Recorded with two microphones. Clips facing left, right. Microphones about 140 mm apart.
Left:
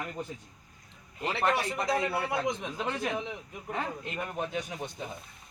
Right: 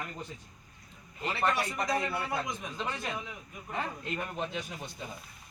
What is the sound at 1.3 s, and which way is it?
A man's voice, 25° left (ahead or behind).